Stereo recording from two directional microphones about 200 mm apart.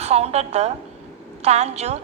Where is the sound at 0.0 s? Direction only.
30° right (ahead or behind).